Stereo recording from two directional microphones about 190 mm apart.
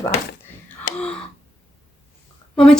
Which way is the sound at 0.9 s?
45° left (ahead or behind).